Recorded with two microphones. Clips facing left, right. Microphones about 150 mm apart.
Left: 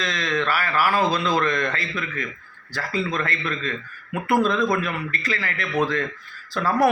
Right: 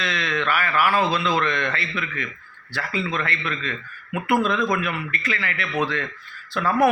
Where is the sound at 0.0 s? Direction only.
40° left (ahead or behind).